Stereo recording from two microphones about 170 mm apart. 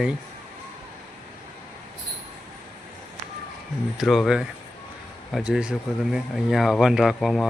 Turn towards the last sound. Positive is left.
turn(degrees=0)  # may be behind; listen again after turning